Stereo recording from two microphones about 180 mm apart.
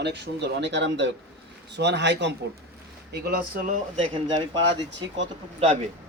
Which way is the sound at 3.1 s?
60° right (ahead or behind).